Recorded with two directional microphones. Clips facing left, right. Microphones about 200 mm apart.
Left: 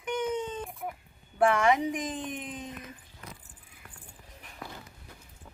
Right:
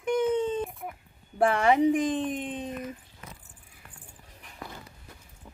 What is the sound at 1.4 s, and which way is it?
Speech, 35° right (ahead or behind).